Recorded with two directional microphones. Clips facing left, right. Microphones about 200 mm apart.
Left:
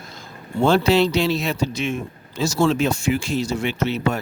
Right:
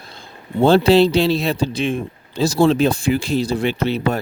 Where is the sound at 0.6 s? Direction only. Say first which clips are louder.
Right 4 dB; 30° right (ahead or behind).